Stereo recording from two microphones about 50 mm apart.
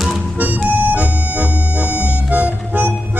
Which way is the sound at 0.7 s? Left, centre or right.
Right.